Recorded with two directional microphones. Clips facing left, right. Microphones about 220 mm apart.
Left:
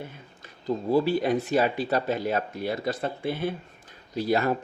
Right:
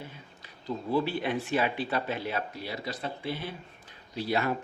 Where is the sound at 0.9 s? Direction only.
40° left (ahead or behind).